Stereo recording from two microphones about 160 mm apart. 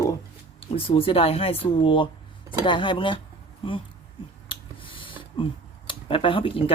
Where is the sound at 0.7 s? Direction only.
35° left (ahead or behind).